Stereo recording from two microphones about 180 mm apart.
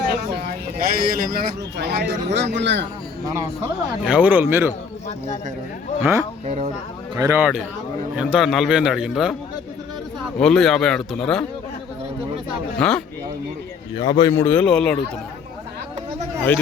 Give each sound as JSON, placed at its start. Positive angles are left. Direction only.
{"t": 0.8, "sound": "a man's voice", "side_deg": -55}
{"t": 4.0, "sound": "speech", "side_deg": -5}
{"t": 6.0, "sound": "speech", "side_deg": -15}
{"t": 6.4, "sound": "speech", "side_deg": -40}
{"t": 7.2, "sound": "a man's voice", "side_deg": -15}
{"t": 10.3, "sound": "a man's voice", "side_deg": 5}
{"t": 12.8, "sound": "a man's voice", "side_deg": 5}
{"t": 13.9, "sound": "speech", "side_deg": 25}
{"t": 14.4, "sound": "a man's voice", "side_deg": 10}